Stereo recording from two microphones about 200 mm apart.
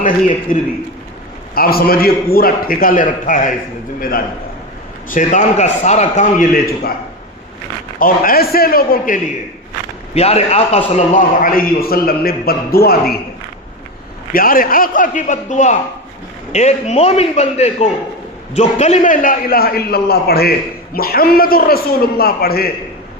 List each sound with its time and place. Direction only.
0.5 s a man's voice: 45° left (ahead or behind)
5.0 s a man's voice: 40° left (ahead or behind)
7.9 s a man's voice: 45° left (ahead or behind)
10.2 s a man's voice: 30° left (ahead or behind); by 13.1 s 50° left (ahead or behind)
14.3 s a man's voice: 45° left (ahead or behind)